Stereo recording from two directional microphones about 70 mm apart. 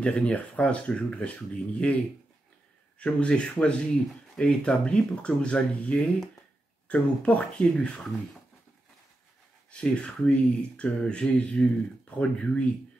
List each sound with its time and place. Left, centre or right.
0.0 s speech: centre
3.0 s speech: centre
9.7 s speech: centre